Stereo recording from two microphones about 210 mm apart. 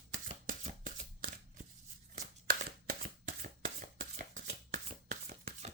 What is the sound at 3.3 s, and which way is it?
Shuffling cards, 40° right (ahead or behind).